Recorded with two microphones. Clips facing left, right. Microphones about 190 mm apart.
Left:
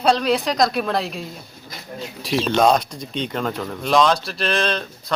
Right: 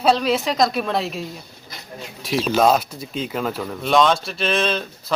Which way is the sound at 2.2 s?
Centre (ahead or behind).